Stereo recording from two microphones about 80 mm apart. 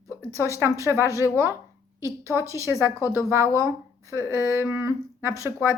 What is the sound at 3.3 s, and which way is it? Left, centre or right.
Speech, right.